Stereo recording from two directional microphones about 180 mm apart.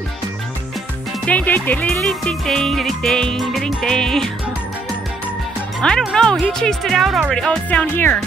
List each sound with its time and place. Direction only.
1.2 s speech: 10° left (ahead or behind)
5.8 s speech: 5° left (ahead or behind)